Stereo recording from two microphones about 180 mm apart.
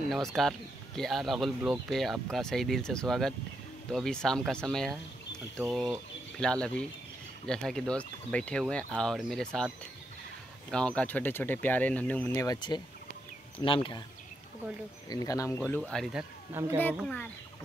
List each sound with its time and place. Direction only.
0.1 s speech: centre (ahead or behind)
6.4 s speech: 5° left (ahead or behind)
10.7 s speech: 5° left (ahead or behind); by 13.7 s 20° left (ahead or behind)
15.0 s speech: 20° left (ahead or behind)
15.6 s speech: 5° left (ahead or behind)
16.6 s speech: 10° right (ahead or behind)
16.9 s speech: centre (ahead or behind)